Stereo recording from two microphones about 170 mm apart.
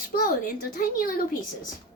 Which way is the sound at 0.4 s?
55° left (ahead or behind).